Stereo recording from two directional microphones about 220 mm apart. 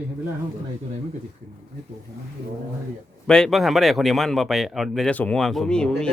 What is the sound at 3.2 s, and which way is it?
Speech, 5° left (ahead or behind).